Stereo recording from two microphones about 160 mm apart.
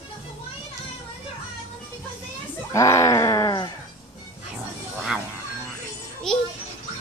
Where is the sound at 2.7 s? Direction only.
20° left (ahead or behind).